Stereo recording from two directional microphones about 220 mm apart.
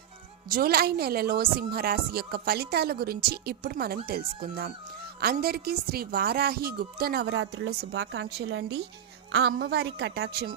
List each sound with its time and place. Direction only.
0.5 s a woman's voice: 45° right (ahead or behind)